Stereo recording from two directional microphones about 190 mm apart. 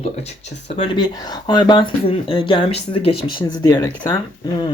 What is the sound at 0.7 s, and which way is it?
A woman's voice, 25° left (ahead or behind).